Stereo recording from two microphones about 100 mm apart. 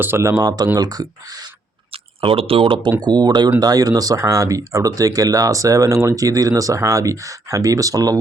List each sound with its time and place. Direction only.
0.0 s speech: 25° right (ahead or behind); by 1.5 s 40° right (ahead or behind)
2.2 s speech: 70° right (ahead or behind)
3.0 s speech: 45° right (ahead or behind)